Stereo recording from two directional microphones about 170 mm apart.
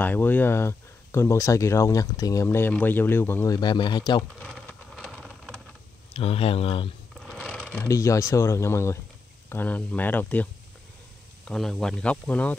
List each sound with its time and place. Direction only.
0.0 s speech: 10° left (ahead or behind); by 4.2 s 25° left (ahead or behind)
4.2 s a sound: 5° left (ahead or behind)
6.1 s speech: 35° left (ahead or behind)
7.2 s speech: centre (ahead or behind)